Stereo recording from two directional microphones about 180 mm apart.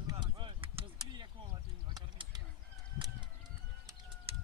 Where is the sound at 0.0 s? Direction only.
20° right (ahead or behind).